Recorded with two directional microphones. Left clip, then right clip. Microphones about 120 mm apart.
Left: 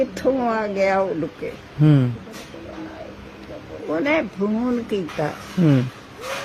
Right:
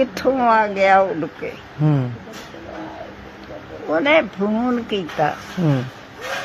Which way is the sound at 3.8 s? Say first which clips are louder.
Right 5 dB; 25° left (ahead or behind).